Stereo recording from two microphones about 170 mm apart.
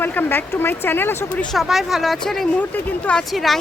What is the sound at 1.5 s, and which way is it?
A woman's voice, centre (ahead or behind).